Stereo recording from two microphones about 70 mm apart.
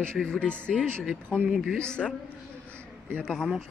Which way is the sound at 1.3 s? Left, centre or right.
Right.